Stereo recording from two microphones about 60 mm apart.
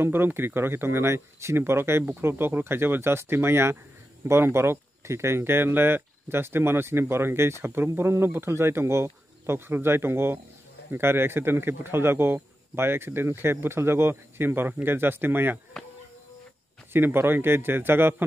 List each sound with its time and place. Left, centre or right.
0.0 s speech: right
16.9 s speech: right